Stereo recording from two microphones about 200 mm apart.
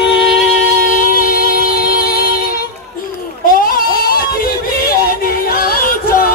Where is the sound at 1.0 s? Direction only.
45° left (ahead or behind).